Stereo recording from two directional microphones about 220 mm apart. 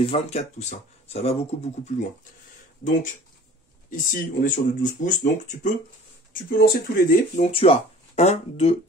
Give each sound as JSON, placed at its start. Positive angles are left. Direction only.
{"t": 0.0, "sound": "speech", "side_deg": 30}